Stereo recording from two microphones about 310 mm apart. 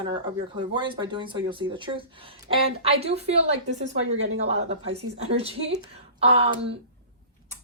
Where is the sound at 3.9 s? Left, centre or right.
Right.